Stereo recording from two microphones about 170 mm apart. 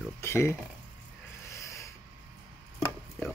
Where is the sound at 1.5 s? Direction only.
15° left (ahead or behind).